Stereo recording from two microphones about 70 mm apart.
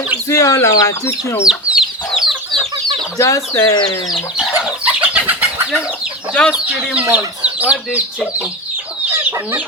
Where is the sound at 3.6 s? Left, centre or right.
Left.